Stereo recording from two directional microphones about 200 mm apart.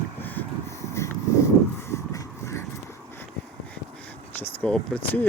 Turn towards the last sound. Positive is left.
turn(degrees=5)  # may be behind; listen again after turning